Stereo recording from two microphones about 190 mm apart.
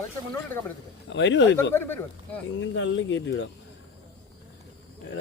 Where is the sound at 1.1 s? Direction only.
70° left (ahead or behind).